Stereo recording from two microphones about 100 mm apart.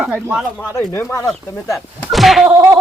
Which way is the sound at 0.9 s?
30° left (ahead or behind).